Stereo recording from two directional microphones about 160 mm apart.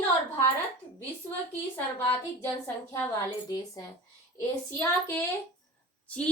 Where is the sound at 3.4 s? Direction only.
25° left (ahead or behind).